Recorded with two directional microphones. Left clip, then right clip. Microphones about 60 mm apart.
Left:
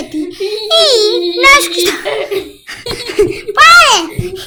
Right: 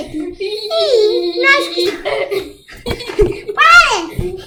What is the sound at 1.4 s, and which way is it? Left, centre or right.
Speech, left.